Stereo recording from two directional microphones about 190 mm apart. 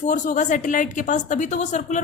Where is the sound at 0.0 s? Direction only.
40° left (ahead or behind).